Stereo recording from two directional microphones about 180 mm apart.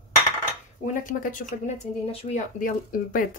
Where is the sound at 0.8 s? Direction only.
45° left (ahead or behind).